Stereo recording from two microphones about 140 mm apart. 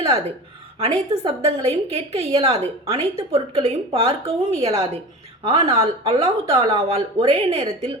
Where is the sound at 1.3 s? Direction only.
50° right (ahead or behind).